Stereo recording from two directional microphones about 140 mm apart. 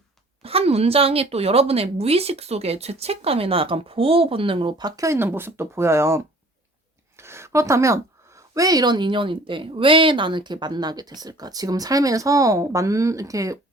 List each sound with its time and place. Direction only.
0.4 s a woman's voice: 45° right (ahead or behind); by 13.6 s 25° right (ahead or behind)